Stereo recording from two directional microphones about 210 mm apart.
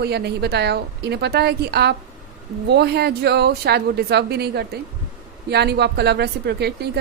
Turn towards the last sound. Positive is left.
turn(degrees=-50)  # may be behind; listen again after turning